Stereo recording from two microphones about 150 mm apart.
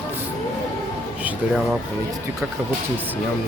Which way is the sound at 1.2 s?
5° right (ahead or behind).